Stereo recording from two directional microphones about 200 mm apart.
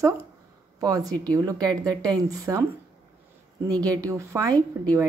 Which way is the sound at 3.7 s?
15° right (ahead or behind).